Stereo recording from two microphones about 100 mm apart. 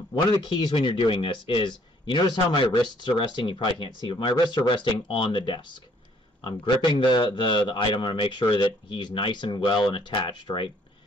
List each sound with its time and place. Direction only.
0.3 s speech: 50° left (ahead or behind)
7.0 s a man's voice: 50° left (ahead or behind)